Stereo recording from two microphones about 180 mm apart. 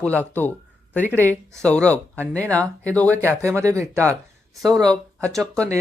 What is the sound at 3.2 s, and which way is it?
Speech, 15° right (ahead or behind).